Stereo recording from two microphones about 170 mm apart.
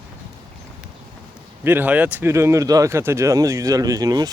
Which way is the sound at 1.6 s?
10° right (ahead or behind).